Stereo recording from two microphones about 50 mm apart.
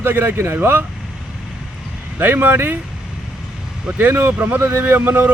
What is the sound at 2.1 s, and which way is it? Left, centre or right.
Speech, right.